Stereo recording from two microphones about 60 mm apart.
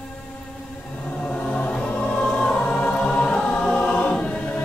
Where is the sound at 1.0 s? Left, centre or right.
Centre.